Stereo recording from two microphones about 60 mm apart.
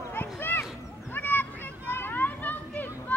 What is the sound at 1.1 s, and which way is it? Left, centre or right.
Children playing, left.